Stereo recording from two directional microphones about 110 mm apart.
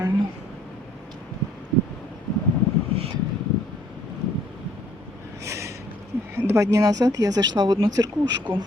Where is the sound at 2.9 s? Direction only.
60° right (ahead or behind).